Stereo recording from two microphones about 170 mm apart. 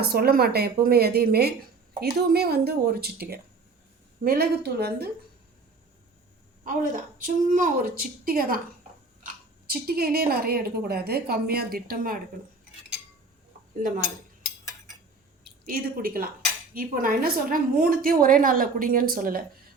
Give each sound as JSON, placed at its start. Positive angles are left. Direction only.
{"t": 0.0, "sound": "a woman's voice", "side_deg": -65}
{"t": 6.7, "sound": "a woman's voice", "side_deg": -50}
{"t": 13.8, "sound": "a woman's voice", "side_deg": -50}
{"t": 15.6, "sound": "speech", "side_deg": -55}